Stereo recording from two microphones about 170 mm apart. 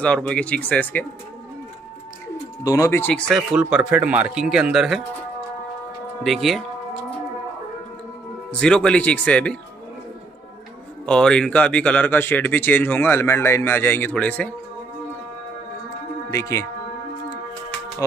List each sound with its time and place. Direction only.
0.0 s speech: 5° left (ahead or behind)
2.6 s speech: 20° left (ahead or behind)
3.5 s speech: 5° right (ahead or behind)
6.2 s speech: centre (ahead or behind)
8.5 s speech: 5° left (ahead or behind)
11.1 s speech: 5° left (ahead or behind)
16.3 s speech: 15° left (ahead or behind)